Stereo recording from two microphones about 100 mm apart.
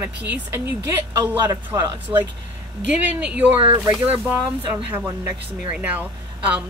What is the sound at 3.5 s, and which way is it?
Speech, 65° right (ahead or behind).